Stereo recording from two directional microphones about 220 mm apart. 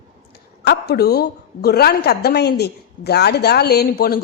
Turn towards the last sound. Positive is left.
turn(degrees=45)  # may be behind; listen again after turning